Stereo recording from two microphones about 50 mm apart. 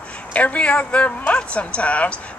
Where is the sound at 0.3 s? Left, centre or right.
Left.